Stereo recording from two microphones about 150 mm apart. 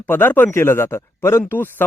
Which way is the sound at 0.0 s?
15° left (ahead or behind).